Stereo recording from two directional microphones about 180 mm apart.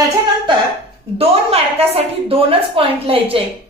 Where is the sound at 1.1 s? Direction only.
35° right (ahead or behind).